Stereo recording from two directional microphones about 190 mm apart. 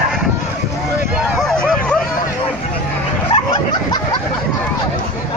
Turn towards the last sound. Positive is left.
turn(degrees=25)  # may be behind; listen again after turning